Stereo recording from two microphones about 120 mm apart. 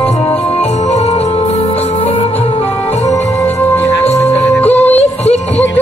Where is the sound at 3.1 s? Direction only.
25° left (ahead or behind).